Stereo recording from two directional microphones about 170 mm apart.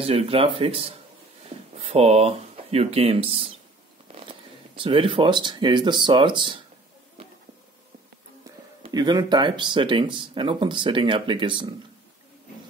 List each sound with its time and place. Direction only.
0.0 s speech: 35° right (ahead or behind)
8.9 s speech: 25° right (ahead or behind)